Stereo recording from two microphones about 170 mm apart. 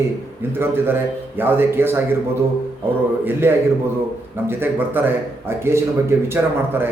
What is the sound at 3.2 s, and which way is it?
A man's voice, 10° right (ahead or behind).